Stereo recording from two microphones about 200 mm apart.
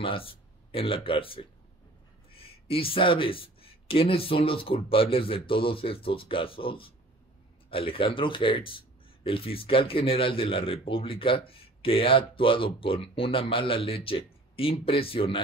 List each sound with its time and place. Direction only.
0.0 s speech: 25° left (ahead or behind)